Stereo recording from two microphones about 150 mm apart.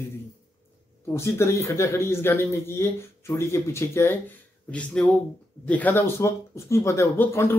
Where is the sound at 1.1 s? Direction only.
20° left (ahead or behind).